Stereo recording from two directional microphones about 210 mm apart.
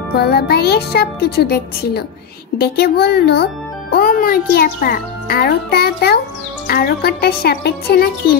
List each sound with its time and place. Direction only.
0.1 s a child's voice: 50° left (ahead or behind)